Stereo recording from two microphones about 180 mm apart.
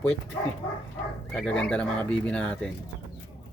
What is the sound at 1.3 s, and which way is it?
Speech, 5° left (ahead or behind).